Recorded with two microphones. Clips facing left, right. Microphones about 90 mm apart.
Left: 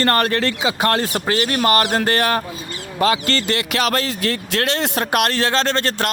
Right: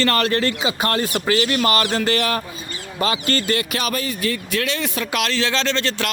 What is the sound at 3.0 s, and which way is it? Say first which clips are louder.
Speech: left 3 dB; 65° left (ahead or behind).